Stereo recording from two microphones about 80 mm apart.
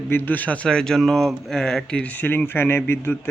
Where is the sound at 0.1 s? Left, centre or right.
Left.